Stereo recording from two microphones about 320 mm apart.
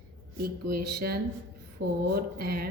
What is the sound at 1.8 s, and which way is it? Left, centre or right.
Speech, right.